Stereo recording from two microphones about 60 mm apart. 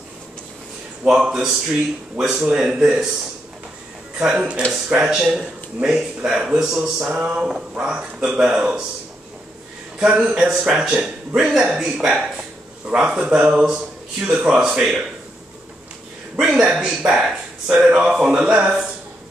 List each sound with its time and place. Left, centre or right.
1.0 s speech: centre
4.2 s speech: centre
9.9 s speech: centre
16.3 s speech: centre